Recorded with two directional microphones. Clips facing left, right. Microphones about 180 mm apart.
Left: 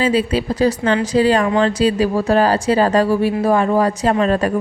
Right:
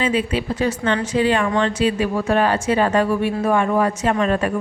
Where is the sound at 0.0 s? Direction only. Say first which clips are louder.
Left 4 dB; 35° left (ahead or behind).